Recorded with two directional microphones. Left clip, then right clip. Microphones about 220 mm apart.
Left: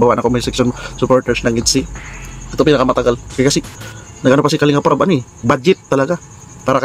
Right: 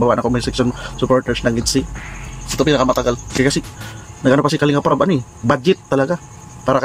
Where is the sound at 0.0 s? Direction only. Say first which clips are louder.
Left 3 dB; 15° left (ahead or behind).